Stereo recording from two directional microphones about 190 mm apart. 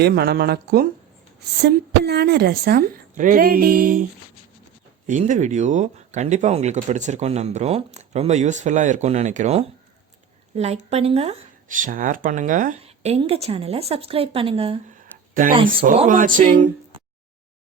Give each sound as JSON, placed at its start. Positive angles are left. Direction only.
{"t": 0.0, "sound": "a woman's voice", "side_deg": -55}
{"t": 5.0, "sound": "speech", "side_deg": -40}
{"t": 16.0, "sound": "a woman's voice", "side_deg": -45}